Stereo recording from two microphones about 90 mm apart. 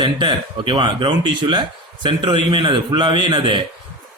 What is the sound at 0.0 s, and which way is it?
A man's voice, 60° right (ahead or behind).